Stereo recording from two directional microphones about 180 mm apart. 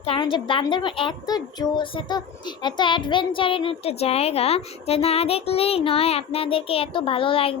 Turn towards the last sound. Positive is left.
turn(degrees=30)  # may be behind; listen again after turning